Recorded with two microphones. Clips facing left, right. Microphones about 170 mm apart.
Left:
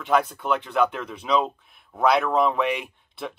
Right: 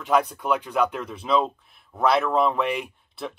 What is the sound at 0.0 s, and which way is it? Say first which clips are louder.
Speech: even; centre (ahead or behind).